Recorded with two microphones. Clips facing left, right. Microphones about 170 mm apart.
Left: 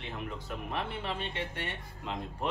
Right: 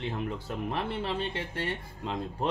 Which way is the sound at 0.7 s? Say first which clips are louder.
Right 3 dB; 35° right (ahead or behind).